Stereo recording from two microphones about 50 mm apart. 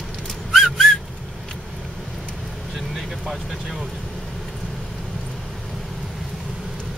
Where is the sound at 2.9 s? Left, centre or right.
Centre.